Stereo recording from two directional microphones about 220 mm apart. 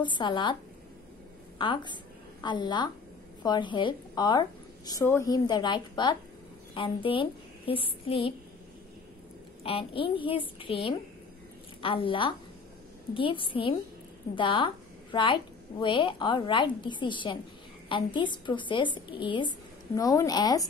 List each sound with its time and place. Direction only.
0.0 s a woman's voice: 20° left (ahead or behind)
1.6 s a woman's voice: 20° left (ahead or behind)
9.6 s a woman's voice: 25° left (ahead or behind)